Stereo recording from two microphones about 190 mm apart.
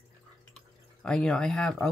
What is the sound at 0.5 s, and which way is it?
Drip, 5° left (ahead or behind).